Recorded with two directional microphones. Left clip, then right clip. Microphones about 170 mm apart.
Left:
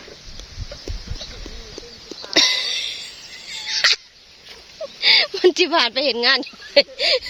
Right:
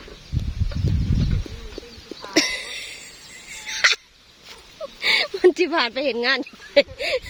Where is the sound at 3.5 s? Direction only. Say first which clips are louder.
Left 1 dB; 20° right (ahead or behind).